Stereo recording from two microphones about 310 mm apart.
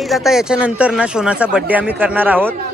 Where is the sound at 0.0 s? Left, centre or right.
Centre.